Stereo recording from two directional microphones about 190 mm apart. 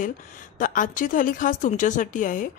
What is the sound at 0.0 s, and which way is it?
Speech, 45° left (ahead or behind).